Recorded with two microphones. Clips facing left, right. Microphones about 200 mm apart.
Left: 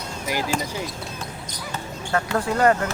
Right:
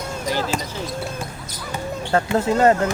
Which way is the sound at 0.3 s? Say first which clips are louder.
Right 1 dB; 10° left (ahead or behind).